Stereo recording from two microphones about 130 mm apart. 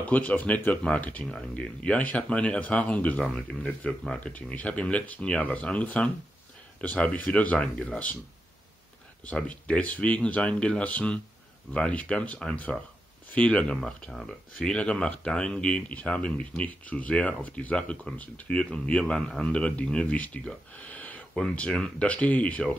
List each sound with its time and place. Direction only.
0.0 s speech: 10° left (ahead or behind)
9.2 s speech: 10° left (ahead or behind)